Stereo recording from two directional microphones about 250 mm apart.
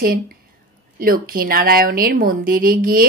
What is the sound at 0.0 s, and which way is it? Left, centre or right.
A woman's voice, right.